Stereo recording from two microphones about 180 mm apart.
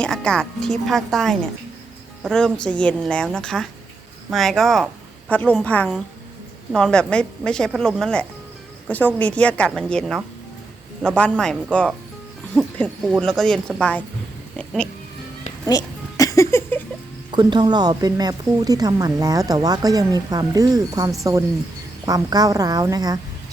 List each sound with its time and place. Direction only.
0.0 s a woman's voice: 5° left (ahead or behind)
15.6 s a sound: 20° left (ahead or behind)
17.3 s a woman's voice: 25° right (ahead or behind)